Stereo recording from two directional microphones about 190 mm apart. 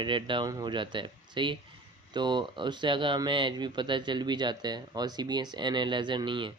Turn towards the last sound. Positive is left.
turn(degrees=-25)  # may be behind; listen again after turning